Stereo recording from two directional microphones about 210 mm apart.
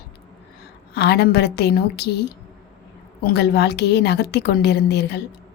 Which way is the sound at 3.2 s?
50° left (ahead or behind).